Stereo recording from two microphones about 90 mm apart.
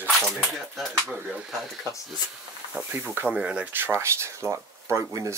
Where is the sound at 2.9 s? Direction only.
25° right (ahead or behind).